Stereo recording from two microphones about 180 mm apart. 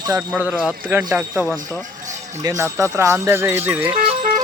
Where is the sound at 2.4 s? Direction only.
20° right (ahead or behind).